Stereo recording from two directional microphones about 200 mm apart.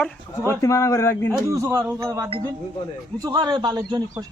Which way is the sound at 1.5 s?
15° right (ahead or behind).